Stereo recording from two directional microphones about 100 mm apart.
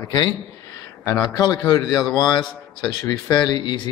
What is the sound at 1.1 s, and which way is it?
A man's voice, 40° left (ahead or behind).